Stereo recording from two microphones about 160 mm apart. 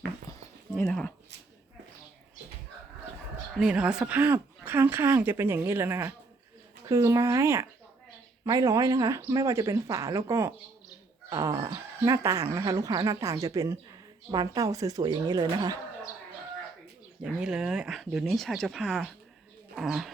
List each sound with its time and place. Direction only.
0.9 s speech: 5° left (ahead or behind)
3.6 s speech: 5° right (ahead or behind); by 15.8 s 25° right (ahead or behind)
17.2 s speech: 5° right (ahead or behind)